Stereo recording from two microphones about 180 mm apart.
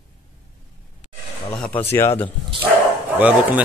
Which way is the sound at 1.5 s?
5° left (ahead or behind).